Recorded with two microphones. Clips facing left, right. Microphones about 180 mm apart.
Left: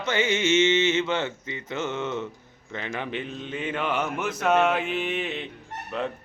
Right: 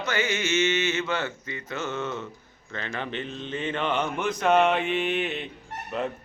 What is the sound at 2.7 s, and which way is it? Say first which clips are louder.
Speech: left 1 dB; 15° left (ahead or behind).